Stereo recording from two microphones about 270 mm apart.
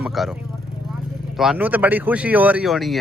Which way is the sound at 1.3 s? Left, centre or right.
Centre.